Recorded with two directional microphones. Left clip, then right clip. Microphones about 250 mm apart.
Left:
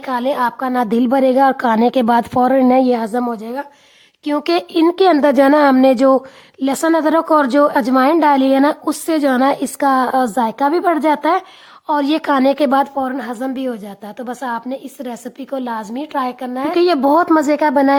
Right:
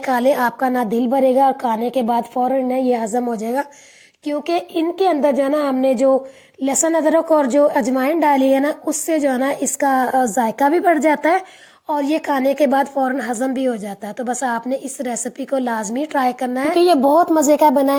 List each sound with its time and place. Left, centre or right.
0.0 s a woman's voice: centre
4.4 s a woman's voice: left; by 16.7 s centre
16.7 s a woman's voice: centre